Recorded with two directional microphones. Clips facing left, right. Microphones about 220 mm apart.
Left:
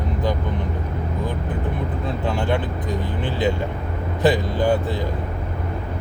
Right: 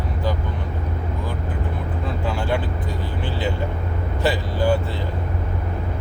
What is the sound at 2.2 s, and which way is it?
Vehicle, 20° left (ahead or behind).